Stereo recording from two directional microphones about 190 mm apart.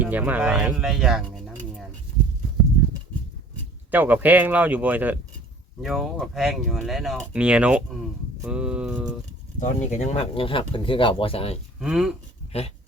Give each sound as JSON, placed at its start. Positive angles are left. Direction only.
{"t": 0.0, "sound": "speech", "side_deg": -10}
{"t": 3.9, "sound": "speech", "side_deg": -10}
{"t": 9.6, "sound": "speech", "side_deg": 35}
{"t": 11.8, "sound": "speech", "side_deg": 0}